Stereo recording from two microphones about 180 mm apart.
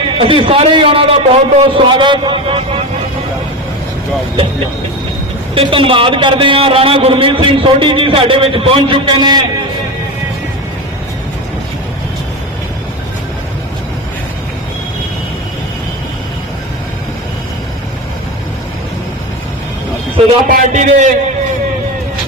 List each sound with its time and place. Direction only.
0.2 s a man's voice: 30° right (ahead or behind)
5.5 s a man's voice: 30° right (ahead or behind)
20.5 s a man's voice: 50° right (ahead or behind)